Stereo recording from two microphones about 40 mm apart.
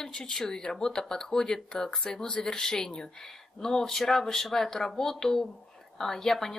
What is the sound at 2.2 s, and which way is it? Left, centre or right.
Speech, left.